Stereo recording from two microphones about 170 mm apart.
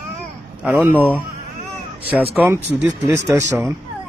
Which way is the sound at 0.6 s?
10° right (ahead or behind).